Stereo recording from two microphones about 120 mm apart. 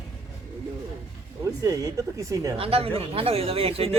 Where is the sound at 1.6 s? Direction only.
30° right (ahead or behind).